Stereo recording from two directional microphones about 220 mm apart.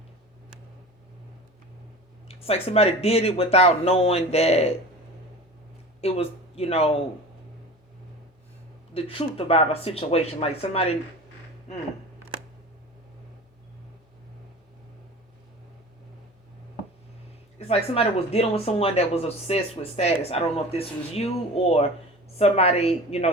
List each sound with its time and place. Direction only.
2.2 s speech: 30° left (ahead or behind)
6.0 s speech: 25° left (ahead or behind)
8.9 s speech: 25° left (ahead or behind)
17.6 s speech: 25° left (ahead or behind)